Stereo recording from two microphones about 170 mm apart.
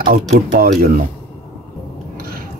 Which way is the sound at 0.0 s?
55° right (ahead or behind).